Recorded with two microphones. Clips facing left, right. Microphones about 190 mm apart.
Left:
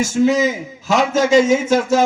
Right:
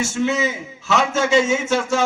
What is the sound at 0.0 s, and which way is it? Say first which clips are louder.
A man's voice: left 6 dB; 40° left (ahead or behind).